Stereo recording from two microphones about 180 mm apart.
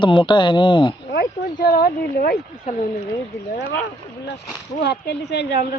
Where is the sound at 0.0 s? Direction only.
25° left (ahead or behind).